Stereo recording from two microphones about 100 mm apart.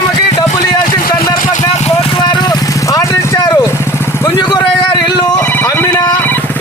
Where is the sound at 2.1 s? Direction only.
45° left (ahead or behind); by 3.3 s 30° left (ahead or behind).